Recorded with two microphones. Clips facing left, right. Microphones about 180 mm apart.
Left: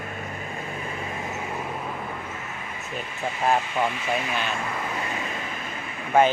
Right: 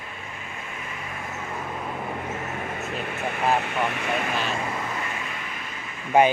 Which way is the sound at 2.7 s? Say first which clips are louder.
Right 3 dB; 65° right (ahead or behind).